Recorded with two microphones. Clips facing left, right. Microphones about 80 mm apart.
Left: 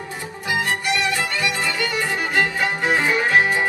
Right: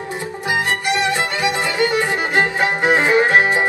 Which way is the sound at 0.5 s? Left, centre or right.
Right.